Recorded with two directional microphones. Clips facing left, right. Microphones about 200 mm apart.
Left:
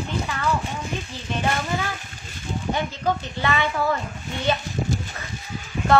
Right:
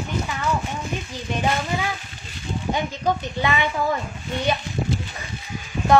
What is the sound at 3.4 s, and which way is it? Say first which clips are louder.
Speech: even; 15° right (ahead or behind).